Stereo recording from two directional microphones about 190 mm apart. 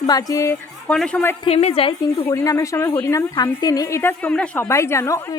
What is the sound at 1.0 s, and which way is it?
Speech, 5° left (ahead or behind).